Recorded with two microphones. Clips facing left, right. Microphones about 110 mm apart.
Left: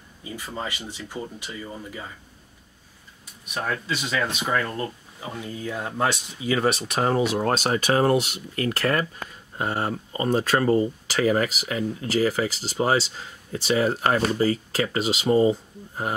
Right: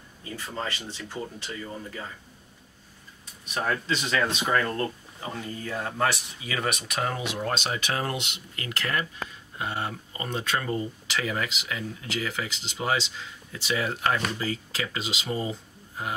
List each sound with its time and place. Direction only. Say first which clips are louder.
0.2 s speech: left 1 dB; 15° left (ahead or behind)
3.5 s speech: even; 5° left (ahead or behind); by 15.5 s 35° left (ahead or behind)